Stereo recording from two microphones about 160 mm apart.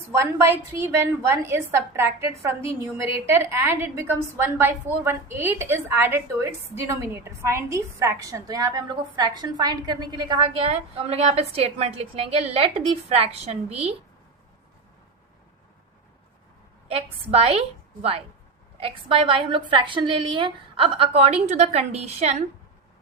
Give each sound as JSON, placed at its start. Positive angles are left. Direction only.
{"t": 0.1, "sound": "a woman's voice", "side_deg": -15}
{"t": 16.9, "sound": "a woman's voice", "side_deg": -40}
{"t": 18.8, "sound": "a woman's voice", "side_deg": -35}